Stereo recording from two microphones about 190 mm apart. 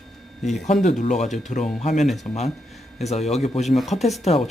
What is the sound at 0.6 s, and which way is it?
Speech, 40° left (ahead or behind).